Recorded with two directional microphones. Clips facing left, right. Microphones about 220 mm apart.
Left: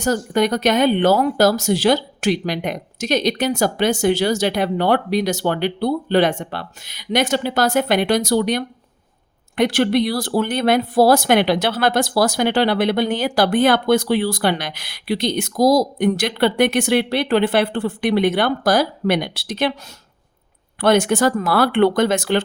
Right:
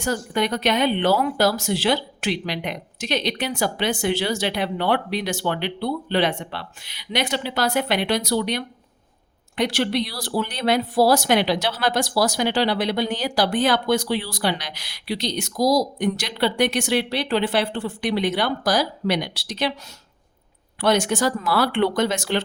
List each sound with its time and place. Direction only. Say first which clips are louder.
0.0 s speech: left 5 dB; 45° left (ahead or behind)
20.8 s speech: left 5 dB; 55° left (ahead or behind)